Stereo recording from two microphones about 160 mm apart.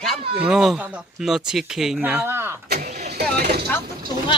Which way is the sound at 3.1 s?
75° right (ahead or behind).